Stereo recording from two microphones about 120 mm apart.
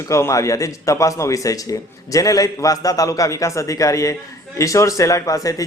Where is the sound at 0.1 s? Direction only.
25° left (ahead or behind).